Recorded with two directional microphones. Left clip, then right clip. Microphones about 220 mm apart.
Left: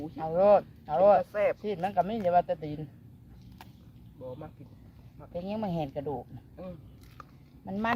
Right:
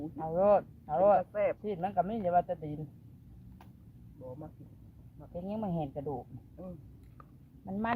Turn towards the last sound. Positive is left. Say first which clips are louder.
# left 4 dB
turn(degrees=-10)  # may be behind; listen again after turning